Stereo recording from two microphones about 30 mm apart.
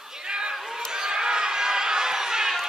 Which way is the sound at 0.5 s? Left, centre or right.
Centre.